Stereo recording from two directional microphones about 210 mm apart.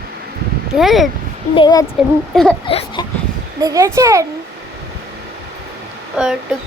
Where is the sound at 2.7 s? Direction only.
25° left (ahead or behind).